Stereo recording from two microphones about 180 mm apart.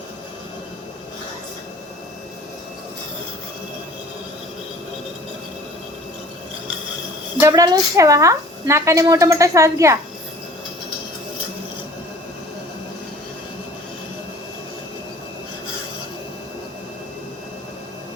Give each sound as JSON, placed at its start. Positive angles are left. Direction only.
{"t": 7.3, "sound": "a woman's voice", "side_deg": -15}